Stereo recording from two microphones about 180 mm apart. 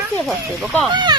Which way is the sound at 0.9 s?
25° right (ahead or behind).